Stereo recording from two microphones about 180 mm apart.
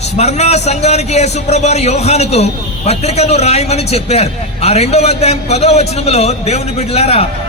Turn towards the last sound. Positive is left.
turn(degrees=35)  # may be behind; listen again after turning